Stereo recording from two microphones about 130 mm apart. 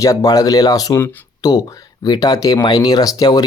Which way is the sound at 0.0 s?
25° left (ahead or behind).